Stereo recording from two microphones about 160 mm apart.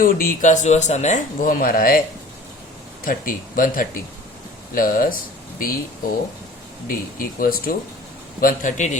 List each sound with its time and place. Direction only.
0.0 s speech: 60° left (ahead or behind)
3.0 s speech: 60° left (ahead or behind)
6.8 s a man's voice: 65° left (ahead or behind)